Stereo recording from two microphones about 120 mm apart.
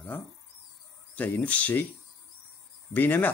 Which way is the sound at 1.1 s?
15° left (ahead or behind).